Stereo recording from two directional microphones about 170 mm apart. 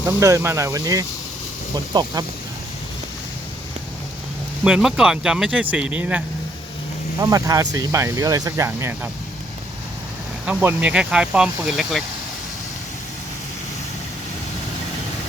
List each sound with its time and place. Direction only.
0.2 s speech: 15° right (ahead or behind)
4.6 s speech: 5° right (ahead or behind)
7.2 s speech: 20° right (ahead or behind)
10.4 s speech: 10° right (ahead or behind)